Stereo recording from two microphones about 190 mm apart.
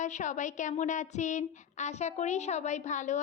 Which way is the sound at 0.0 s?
40° left (ahead or behind).